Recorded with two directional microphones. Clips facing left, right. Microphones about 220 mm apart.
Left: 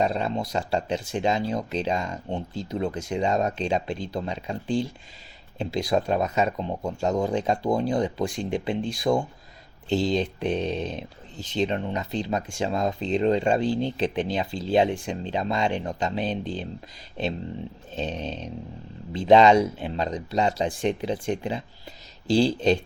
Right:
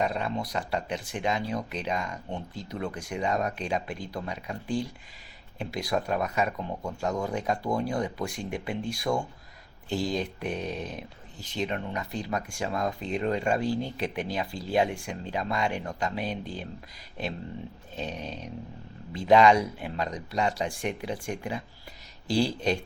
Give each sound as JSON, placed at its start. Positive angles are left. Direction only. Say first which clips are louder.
{"t": 0.0, "sound": "speech", "louder": "left 4 dB", "side_deg": 25}
{"t": 17.9, "sound": "speech", "louder": "left 5 dB", "side_deg": 25}